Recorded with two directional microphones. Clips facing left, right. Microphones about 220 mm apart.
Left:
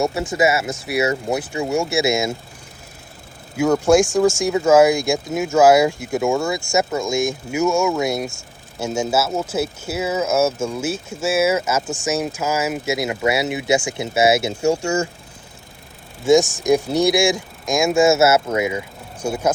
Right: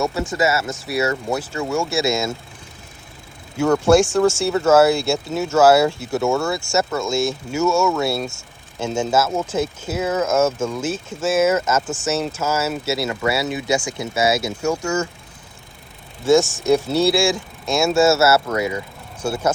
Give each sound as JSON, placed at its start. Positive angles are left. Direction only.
{"t": 0.0, "sound": "speech", "side_deg": 20}
{"t": 3.6, "sound": "speech", "side_deg": 10}
{"t": 16.2, "sound": "speech", "side_deg": 15}